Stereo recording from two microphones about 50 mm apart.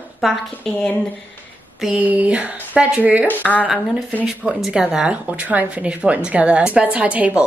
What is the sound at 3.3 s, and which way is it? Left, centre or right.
Speech, left.